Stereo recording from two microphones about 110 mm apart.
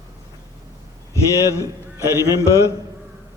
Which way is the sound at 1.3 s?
25° left (ahead or behind).